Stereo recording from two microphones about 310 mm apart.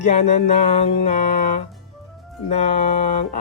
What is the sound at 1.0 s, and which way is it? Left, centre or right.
Speech, left.